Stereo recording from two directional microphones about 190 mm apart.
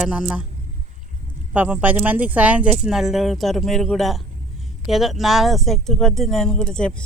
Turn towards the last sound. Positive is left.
turn(degrees=5)  # may be behind; listen again after turning